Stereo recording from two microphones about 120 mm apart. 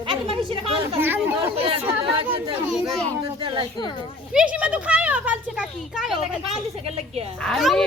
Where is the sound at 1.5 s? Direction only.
50° right (ahead or behind).